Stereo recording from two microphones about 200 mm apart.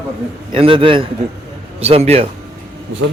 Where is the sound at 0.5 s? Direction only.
25° right (ahead or behind).